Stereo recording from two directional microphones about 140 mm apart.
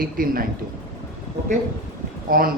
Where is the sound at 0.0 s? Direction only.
90° right.